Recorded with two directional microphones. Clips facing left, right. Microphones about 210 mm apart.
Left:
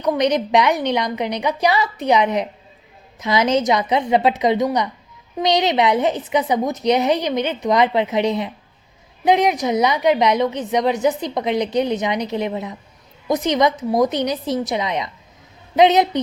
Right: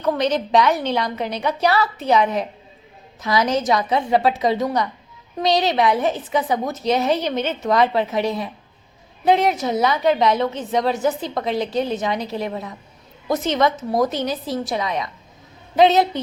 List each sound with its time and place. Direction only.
0.0 s a woman's voice: 15° left (ahead or behind)